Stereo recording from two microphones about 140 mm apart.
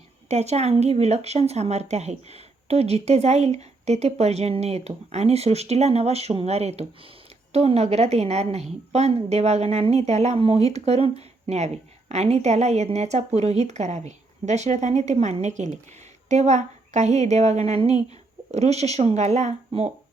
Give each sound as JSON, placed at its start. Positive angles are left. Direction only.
{"t": 0.3, "sound": "a woman's voice", "side_deg": -50}